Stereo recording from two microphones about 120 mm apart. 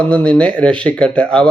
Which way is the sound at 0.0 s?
10° left (ahead or behind).